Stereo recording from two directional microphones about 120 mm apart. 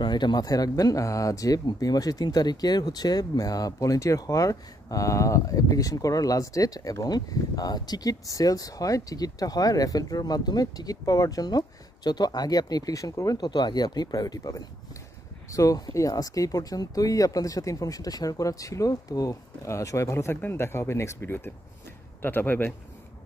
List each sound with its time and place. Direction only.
0.0 s a man's voice: 35° left (ahead or behind); by 22.7 s 15° left (ahead or behind)